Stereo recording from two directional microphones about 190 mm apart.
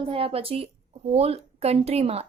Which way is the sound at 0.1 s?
30° right (ahead or behind).